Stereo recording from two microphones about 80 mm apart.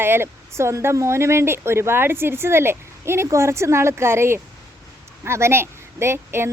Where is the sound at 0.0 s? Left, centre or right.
Right.